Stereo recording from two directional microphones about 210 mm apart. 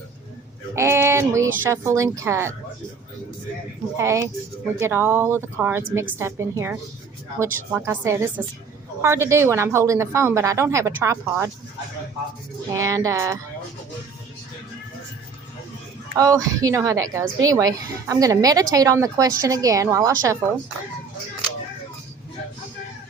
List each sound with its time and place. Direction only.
0.8 s a sound: 15° right (ahead or behind)
1.6 s a woman's voice: 15° right (ahead or behind)
3.9 s a woman's voice: 15° right (ahead or behind)
12.7 s a woman's voice: 15° right (ahead or behind)
16.1 s a woman's voice: 15° right (ahead or behind)